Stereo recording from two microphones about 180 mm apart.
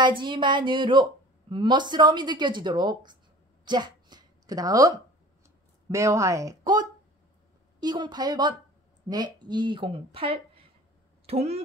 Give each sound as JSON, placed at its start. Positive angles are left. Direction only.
{"t": 0.2, "sound": "speech", "side_deg": -25}
{"t": 3.6, "sound": "a sound", "side_deg": -25}
{"t": 5.9, "sound": "speech", "side_deg": -15}